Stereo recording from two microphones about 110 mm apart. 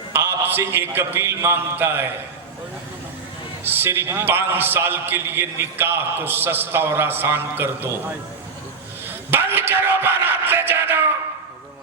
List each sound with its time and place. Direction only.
0.1 s a man's voice: 20° right (ahead or behind)
3.6 s a man's voice: 20° right (ahead or behind)
9.0 s a sound: 20° right (ahead or behind)